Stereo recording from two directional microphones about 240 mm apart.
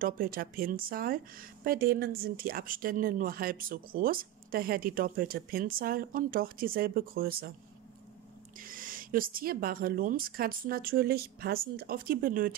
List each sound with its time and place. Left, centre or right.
0.0 s speech: right
8.5 s speech: right